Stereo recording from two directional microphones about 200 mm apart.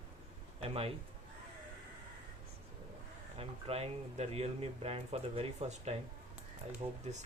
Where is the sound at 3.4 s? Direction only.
30° right (ahead or behind).